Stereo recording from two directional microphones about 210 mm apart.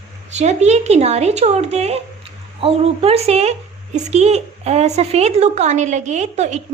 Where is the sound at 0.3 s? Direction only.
30° right (ahead or behind).